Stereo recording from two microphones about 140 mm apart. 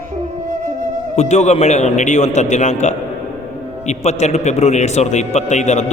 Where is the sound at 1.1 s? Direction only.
55° left (ahead or behind).